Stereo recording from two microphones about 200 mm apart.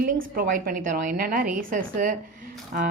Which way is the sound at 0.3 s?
45° right (ahead or behind).